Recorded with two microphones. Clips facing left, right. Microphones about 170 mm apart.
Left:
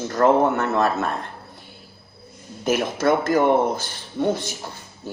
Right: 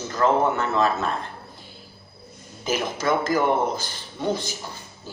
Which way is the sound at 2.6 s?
55° left (ahead or behind).